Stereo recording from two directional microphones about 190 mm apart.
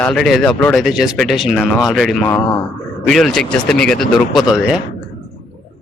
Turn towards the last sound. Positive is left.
turn(degrees=-5)  # may be behind; listen again after turning